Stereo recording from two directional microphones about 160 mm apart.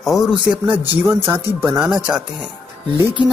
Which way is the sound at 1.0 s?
15° right (ahead or behind).